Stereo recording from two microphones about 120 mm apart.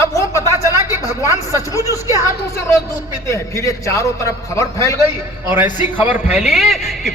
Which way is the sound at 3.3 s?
25° left (ahead or behind).